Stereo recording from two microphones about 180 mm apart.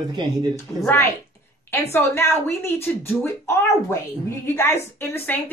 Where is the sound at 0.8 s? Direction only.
15° left (ahead or behind).